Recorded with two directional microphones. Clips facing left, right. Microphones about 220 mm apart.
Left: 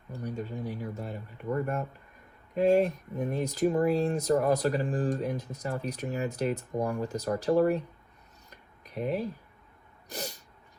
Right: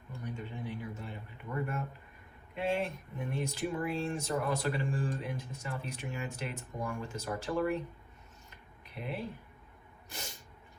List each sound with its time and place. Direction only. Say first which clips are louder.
0.1 s speech: left 6 dB; 40° left (ahead or behind)
8.4 s a sound: left 2 dB; 40° left (ahead or behind)
10.1 s sneeze: left 9 dB; 40° left (ahead or behind)